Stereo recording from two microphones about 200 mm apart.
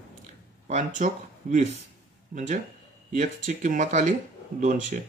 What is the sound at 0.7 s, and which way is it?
Speech, 40° right (ahead or behind).